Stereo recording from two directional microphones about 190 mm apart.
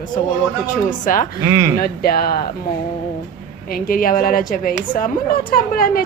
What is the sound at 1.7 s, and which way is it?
Speech, 50° left (ahead or behind).